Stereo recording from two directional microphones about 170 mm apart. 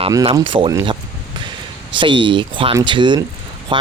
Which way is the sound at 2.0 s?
30° right (ahead or behind).